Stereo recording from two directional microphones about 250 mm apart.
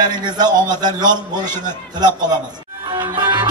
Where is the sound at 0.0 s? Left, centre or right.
Centre.